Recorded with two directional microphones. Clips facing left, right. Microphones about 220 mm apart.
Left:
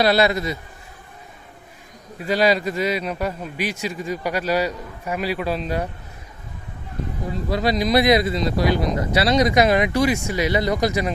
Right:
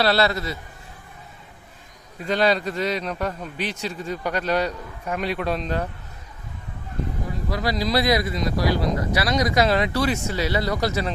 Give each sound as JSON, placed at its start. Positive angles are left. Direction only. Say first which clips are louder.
{"t": 0.0, "sound": "a man's voice", "louder": "left 3 dB", "side_deg": 15}
{"t": 2.1, "sound": "a man's voice", "louder": "left 2 dB", "side_deg": 10}
{"t": 7.5, "sound": "speech", "louder": "left 4 dB", "side_deg": 25}